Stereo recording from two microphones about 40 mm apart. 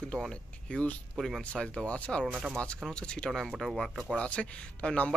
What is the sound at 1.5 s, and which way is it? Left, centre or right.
Speech, left.